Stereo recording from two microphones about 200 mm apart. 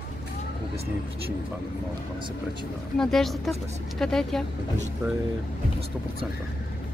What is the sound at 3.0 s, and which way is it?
Speech, centre (ahead or behind).